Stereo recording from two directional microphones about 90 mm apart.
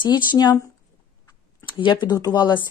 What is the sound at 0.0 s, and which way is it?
Speech, 55° left (ahead or behind).